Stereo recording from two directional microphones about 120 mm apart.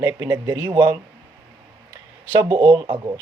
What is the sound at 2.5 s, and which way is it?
Speech, 45° right (ahead or behind).